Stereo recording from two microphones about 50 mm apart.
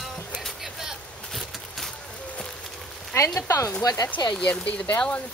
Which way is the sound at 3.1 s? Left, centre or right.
Left.